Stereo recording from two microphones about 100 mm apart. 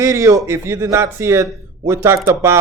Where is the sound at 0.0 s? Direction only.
35° right (ahead or behind).